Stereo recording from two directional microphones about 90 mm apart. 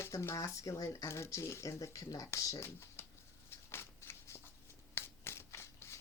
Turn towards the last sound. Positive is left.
turn(degrees=30)  # may be behind; listen again after turning